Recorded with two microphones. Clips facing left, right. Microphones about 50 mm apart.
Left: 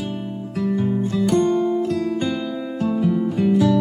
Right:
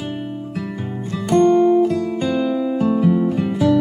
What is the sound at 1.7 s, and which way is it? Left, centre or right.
Music, centre.